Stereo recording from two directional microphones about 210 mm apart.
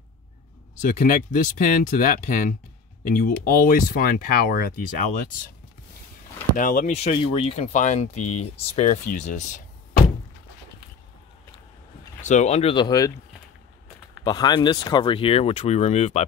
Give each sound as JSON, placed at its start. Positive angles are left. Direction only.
{"t": 0.8, "sound": "speech", "side_deg": 40}
{"t": 6.6, "sound": "speech", "side_deg": 40}
{"t": 8.2, "sound": "speech", "side_deg": 90}
{"t": 8.5, "sound": "speech", "side_deg": 30}
{"t": 12.2, "sound": "speech", "side_deg": 35}
{"t": 14.2, "sound": "speech", "side_deg": 20}